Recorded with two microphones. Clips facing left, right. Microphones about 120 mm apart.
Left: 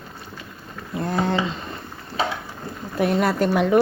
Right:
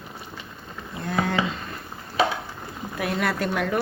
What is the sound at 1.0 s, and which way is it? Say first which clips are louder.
Speech: left 2 dB; 30° left (ahead or behind).